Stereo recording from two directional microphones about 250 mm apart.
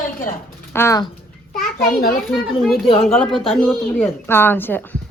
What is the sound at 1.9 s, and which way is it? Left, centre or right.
Speech, left.